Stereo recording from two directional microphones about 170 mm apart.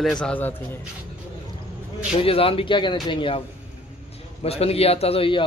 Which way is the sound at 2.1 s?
35° left (ahead or behind).